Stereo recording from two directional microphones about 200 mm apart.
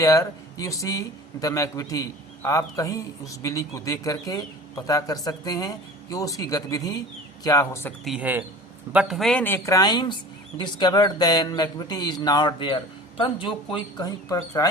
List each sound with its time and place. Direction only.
0.0 s a man's voice: 15° left (ahead or behind)
8.0 s a man's voice: 5° right (ahead or behind); by 14.7 s 20° left (ahead or behind)